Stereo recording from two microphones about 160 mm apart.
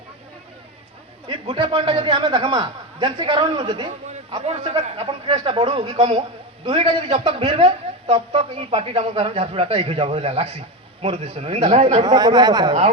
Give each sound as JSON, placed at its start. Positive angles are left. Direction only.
{"t": 1.3, "sound": "a man's voice", "side_deg": -35}
{"t": 3.8, "sound": "a sound", "side_deg": -25}
{"t": 4.4, "sound": "a man's voice", "side_deg": -45}
{"t": 4.7, "sound": "a man's voice", "side_deg": -30}
{"t": 12.0, "sound": "speech", "side_deg": -25}